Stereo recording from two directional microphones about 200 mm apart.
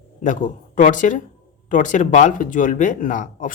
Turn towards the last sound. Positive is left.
turn(degrees=40)  # may be behind; listen again after turning